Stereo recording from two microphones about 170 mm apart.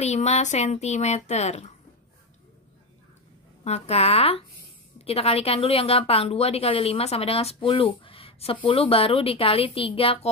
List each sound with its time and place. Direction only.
0.0 s a woman's voice: 40° left (ahead or behind)
3.6 s a woman's voice: 40° left (ahead or behind)